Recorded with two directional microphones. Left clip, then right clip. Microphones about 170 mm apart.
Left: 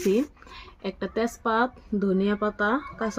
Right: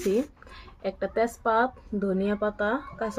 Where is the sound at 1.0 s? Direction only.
55° left (ahead or behind).